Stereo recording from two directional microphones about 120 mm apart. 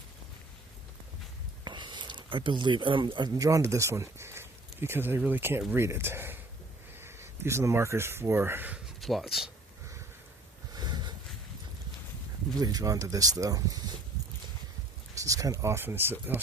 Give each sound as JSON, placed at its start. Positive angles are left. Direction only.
{"t": 1.6, "sound": "speech", "side_deg": -40}
{"t": 9.0, "sound": "speech", "side_deg": 0}
{"t": 10.8, "sound": "a sound", "side_deg": -35}
{"t": 12.5, "sound": "speech", "side_deg": -30}
{"t": 15.2, "sound": "speech", "side_deg": -30}